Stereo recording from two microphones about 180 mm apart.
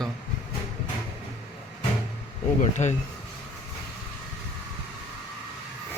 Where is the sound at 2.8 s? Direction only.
40° left (ahead or behind).